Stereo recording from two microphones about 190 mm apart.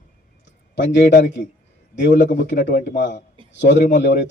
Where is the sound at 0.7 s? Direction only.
65° left (ahead or behind).